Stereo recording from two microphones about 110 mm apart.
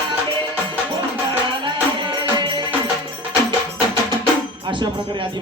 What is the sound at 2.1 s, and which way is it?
Music, 40° right (ahead or behind).